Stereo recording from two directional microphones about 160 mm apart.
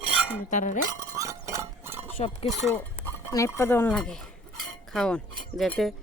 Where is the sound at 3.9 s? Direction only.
5° left (ahead or behind).